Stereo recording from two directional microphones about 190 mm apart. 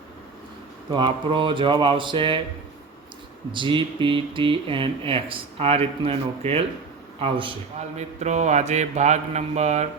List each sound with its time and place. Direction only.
0.9 s speech: 25° right (ahead or behind)
3.5 s a man's voice: 25° right (ahead or behind)